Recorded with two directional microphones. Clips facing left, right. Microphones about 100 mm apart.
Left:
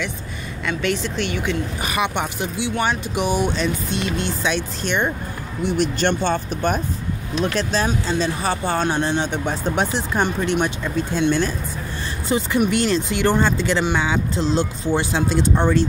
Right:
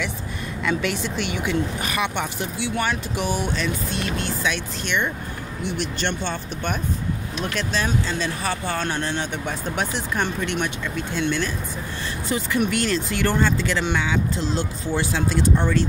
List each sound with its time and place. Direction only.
0.7 s speech: 10° right (ahead or behind)
1.8 s speech: 15° left (ahead or behind); by 11.5 s 35° left (ahead or behind)
12.5 s speech: 20° left (ahead or behind)